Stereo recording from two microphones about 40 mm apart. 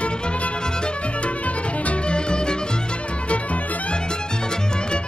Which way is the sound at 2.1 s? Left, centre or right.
Left.